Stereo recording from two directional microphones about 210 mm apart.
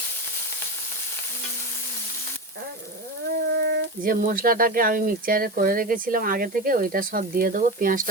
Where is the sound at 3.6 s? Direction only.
40° right (ahead or behind).